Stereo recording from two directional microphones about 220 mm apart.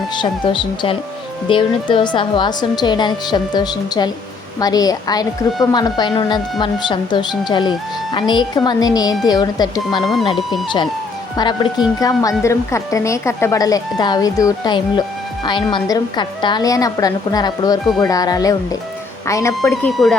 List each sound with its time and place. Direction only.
0.1 s a woman's voice: 20° left (ahead or behind)
10.0 s speech: centre (ahead or behind)
10.5 s a woman's voice: 20° left (ahead or behind)
19.7 s speech: centre (ahead or behind)